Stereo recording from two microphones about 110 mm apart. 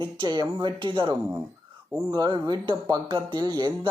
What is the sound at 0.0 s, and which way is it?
Speech, 40° right (ahead or behind).